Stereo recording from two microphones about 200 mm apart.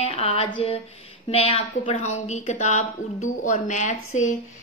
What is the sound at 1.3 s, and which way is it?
A woman's voice, 30° left (ahead or behind).